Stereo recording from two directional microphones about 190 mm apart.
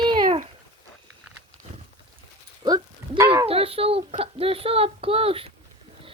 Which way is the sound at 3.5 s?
30° right (ahead or behind).